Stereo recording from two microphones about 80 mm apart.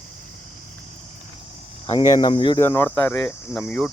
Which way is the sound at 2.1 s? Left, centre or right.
Left.